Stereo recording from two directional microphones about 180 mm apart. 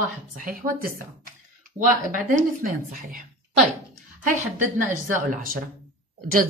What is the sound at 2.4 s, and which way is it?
Speech, 50° right (ahead or behind).